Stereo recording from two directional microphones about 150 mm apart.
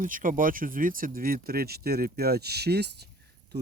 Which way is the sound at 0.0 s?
65° right (ahead or behind).